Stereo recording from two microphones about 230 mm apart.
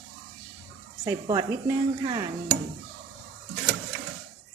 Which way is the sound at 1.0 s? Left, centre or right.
Centre.